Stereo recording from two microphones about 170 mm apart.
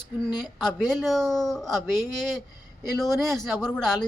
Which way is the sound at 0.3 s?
25° left (ahead or behind).